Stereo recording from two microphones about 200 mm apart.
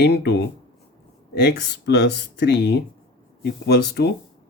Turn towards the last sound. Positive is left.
turn(degrees=55)  # may be behind; listen again after turning